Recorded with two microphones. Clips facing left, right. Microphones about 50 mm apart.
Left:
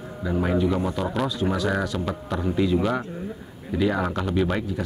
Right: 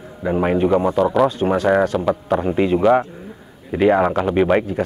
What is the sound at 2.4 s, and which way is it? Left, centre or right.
Speech, right.